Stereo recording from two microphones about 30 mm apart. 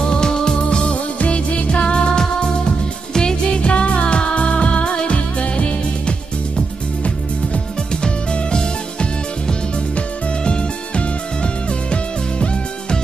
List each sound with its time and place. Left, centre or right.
0.0 s music: left
8.0 s music: left